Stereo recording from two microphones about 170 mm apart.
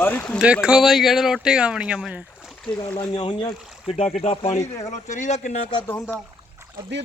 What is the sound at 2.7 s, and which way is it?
Speech, 10° left (ahead or behind).